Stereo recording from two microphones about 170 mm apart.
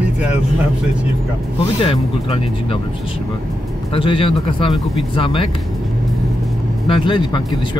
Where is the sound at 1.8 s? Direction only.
30° left (ahead or behind).